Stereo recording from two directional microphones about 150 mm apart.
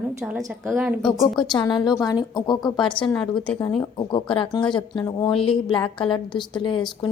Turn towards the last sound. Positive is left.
turn(degrees=35)  # may be behind; listen again after turning